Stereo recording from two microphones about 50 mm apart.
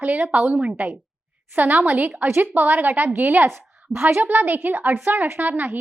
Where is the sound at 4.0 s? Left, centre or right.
Right.